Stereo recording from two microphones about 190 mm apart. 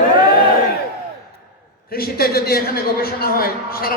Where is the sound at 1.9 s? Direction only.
55° left (ahead or behind).